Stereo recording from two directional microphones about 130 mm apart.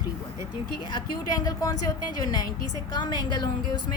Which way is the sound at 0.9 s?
35° left (ahead or behind).